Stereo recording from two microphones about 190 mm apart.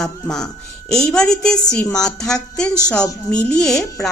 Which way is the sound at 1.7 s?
15° left (ahead or behind).